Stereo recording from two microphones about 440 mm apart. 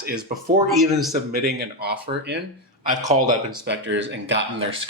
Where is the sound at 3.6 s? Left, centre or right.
Right.